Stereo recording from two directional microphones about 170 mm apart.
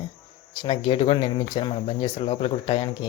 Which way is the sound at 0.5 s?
30° left (ahead or behind).